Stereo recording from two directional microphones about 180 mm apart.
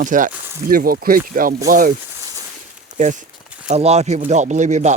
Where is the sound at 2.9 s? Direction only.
45° right (ahead or behind).